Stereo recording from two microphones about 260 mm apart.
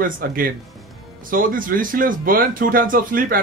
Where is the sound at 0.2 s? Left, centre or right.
Right.